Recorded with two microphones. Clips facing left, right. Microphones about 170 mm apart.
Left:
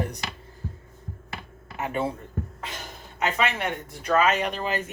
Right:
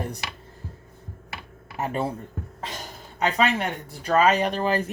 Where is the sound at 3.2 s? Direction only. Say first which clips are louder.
Right 3 dB; 35° right (ahead or behind).